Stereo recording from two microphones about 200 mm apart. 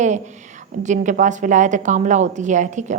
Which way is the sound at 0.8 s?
40° right (ahead or behind).